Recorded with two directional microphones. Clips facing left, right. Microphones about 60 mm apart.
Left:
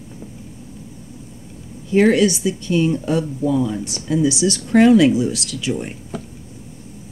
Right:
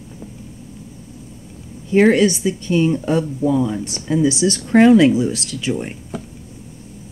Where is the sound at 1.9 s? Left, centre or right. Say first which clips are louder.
Right 1 dB; right.